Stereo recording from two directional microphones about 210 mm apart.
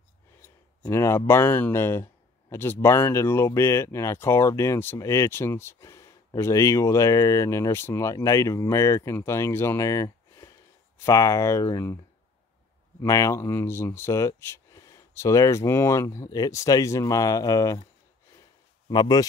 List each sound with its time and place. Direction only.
0.4 s speech: 10° left (ahead or behind)
13.0 s speech: 15° left (ahead or behind)
18.9 s speech: 20° left (ahead or behind)